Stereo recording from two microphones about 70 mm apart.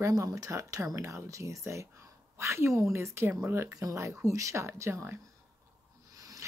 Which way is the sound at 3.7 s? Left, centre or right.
Right.